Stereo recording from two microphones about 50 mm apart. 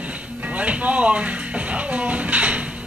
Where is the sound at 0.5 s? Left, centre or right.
Right.